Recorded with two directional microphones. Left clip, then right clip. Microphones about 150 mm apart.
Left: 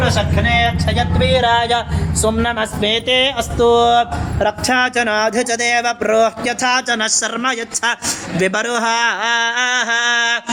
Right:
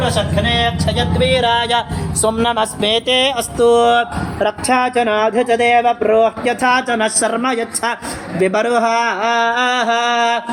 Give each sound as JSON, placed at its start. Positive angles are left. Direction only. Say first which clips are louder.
{"t": 0.4, "sound": "speech", "louder": "left 1 dB", "side_deg": -10}
{"t": 1.2, "sound": "speech", "louder": "even", "side_deg": -30}
{"t": 2.2, "sound": "speech", "louder": "right 2 dB", "side_deg": -50}
{"t": 4.4, "sound": "a man's voice", "louder": "even", "side_deg": -5}